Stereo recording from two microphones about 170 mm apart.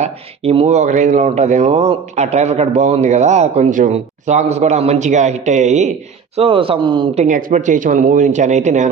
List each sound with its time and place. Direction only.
0.0 s speech: 35° right (ahead or behind)
6.3 s speech: 35° right (ahead or behind)
7.2 s speech: 50° right (ahead or behind)